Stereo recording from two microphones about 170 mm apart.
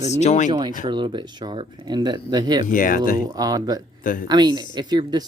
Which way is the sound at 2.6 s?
50° left (ahead or behind).